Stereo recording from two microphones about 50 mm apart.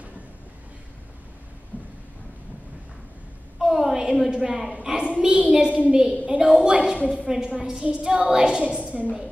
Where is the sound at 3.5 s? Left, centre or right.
Centre.